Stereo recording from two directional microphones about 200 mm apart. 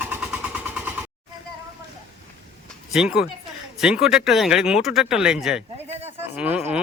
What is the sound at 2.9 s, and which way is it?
Speech, 5° right (ahead or behind).